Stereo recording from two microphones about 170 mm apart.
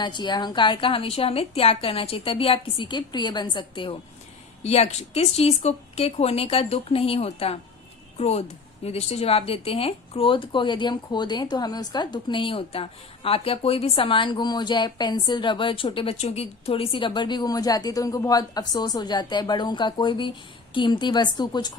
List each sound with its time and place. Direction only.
0.0 s a woman's voice: 25° left (ahead or behind)
4.6 s a woman's voice: 40° left (ahead or behind)